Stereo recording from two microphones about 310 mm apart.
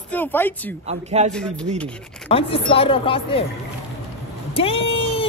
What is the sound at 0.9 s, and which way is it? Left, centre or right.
Speech, right.